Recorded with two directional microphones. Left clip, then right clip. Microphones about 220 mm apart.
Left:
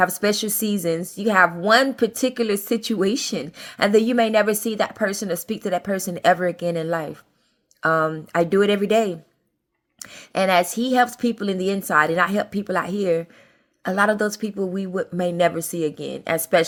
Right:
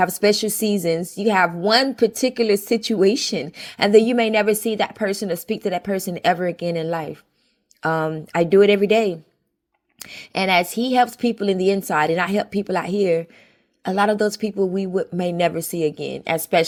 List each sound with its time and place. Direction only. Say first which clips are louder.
0.0 s speech: right 2 dB; 15° right (ahead or behind)
10.3 s a woman's voice: even; 15° right (ahead or behind)